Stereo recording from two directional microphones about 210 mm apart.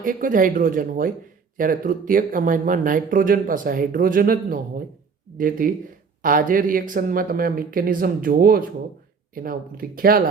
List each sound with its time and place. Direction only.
0.0 s speech: 40° right (ahead or behind)